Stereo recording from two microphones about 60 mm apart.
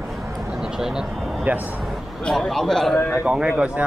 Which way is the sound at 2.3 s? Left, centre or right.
Centre.